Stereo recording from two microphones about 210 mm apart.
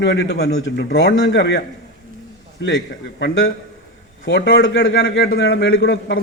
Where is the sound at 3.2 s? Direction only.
65° left (ahead or behind).